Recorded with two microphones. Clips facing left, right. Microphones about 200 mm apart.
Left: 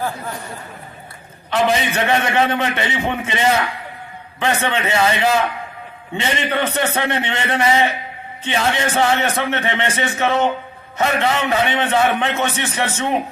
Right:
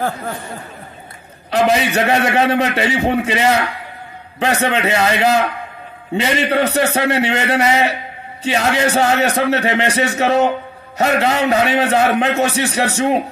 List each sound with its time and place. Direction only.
1.5 s a man's voice: 40° right (ahead or behind)
6.5 s a man's voice: 40° right (ahead or behind)